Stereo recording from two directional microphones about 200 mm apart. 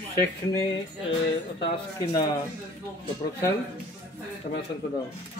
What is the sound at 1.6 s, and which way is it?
Speech, 20° left (ahead or behind).